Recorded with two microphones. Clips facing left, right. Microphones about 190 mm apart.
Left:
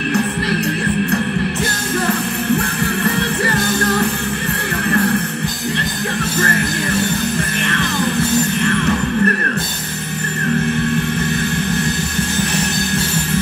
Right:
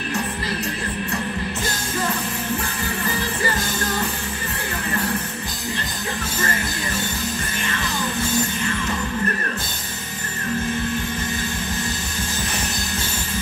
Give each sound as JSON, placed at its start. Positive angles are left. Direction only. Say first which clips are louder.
{"t": 3.2, "sound": "music", "louder": "left 6 dB", "side_deg": 65}
{"t": 8.6, "sound": "music", "louder": "left 8 dB", "side_deg": 65}